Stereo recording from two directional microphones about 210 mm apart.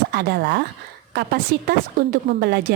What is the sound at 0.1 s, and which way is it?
A woman's voice, 50° right (ahead or behind).